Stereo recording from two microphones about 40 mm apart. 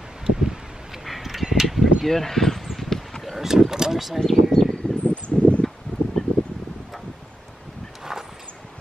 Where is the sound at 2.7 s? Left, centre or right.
Centre.